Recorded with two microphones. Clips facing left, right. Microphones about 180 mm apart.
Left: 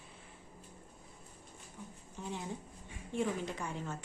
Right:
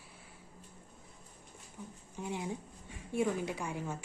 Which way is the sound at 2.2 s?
15° right (ahead or behind).